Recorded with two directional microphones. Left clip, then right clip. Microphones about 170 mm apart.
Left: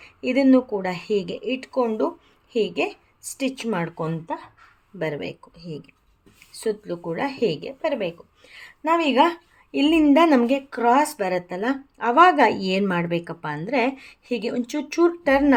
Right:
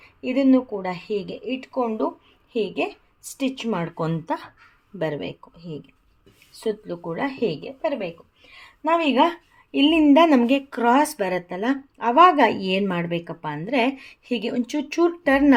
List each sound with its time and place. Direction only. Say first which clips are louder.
0.0 s a woman's voice: left 1 dB; 15° left (ahead or behind); by 3.9 s 5° right (ahead or behind)
3.9 s speech: right 2 dB; 25° right (ahead or behind)
4.9 s a woman's voice: right 1 dB; 10° right (ahead or behind)